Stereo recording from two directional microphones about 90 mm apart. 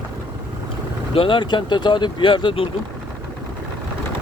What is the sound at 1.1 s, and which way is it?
Speech, 75° left (ahead or behind).